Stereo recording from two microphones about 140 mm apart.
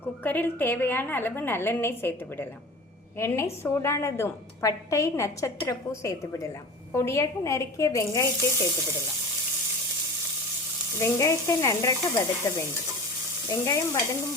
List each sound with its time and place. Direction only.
0.0 s a woman's voice: 15° left (ahead or behind)
11.0 s a woman's voice: 20° left (ahead or behind)